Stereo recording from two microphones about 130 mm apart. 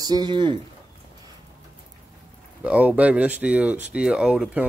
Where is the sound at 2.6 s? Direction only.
10° right (ahead or behind).